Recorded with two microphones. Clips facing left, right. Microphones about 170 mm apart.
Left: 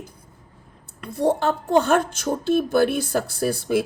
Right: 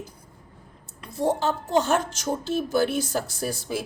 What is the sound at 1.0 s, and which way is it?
Speech, 55° left (ahead or behind).